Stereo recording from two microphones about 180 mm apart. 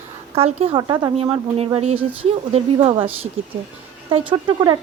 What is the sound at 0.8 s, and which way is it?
Speech, 20° right (ahead or behind).